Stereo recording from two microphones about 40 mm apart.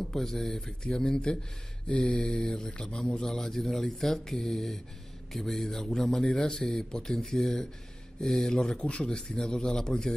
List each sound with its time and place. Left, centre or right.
0.1 s speech: centre; by 2.3 s left
2.3 s speech: centre
3.2 s speech: centre
8.5 s speech: centre